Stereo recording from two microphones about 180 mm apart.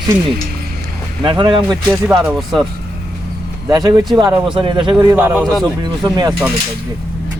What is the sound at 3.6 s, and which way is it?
Speech, 20° right (ahead or behind).